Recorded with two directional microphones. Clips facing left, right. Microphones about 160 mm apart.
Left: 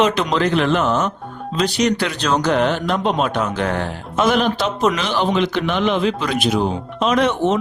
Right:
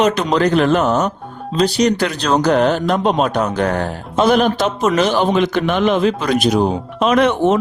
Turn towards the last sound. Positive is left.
turn(degrees=-55)  # may be behind; listen again after turning